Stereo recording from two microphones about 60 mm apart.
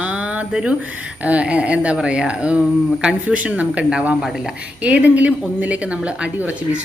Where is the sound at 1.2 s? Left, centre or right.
Right.